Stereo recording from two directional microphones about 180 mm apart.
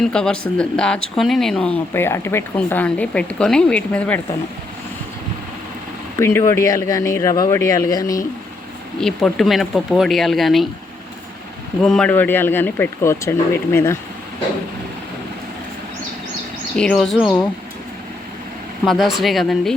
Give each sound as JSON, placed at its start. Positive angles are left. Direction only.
{"t": 0.0, "sound": "speech", "side_deg": 5}
{"t": 6.1, "sound": "speech", "side_deg": 15}
{"t": 9.0, "sound": "speech", "side_deg": 5}
{"t": 11.8, "sound": "speech", "side_deg": 5}
{"t": 16.7, "sound": "speech", "side_deg": 5}
{"t": 18.9, "sound": "speech", "side_deg": 0}